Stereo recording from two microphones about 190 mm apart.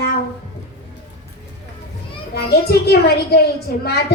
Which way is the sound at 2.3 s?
55° left (ahead or behind).